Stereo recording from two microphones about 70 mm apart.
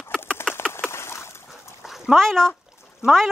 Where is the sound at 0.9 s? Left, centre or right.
Left.